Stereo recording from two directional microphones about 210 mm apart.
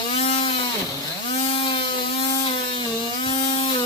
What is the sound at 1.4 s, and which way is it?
Electric toothbrush, 25° left (ahead or behind).